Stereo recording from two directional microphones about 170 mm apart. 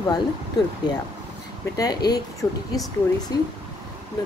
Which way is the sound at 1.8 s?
25° left (ahead or behind).